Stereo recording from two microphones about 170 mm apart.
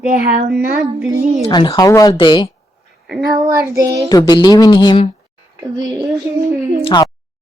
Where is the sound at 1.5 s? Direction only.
25° left (ahead or behind).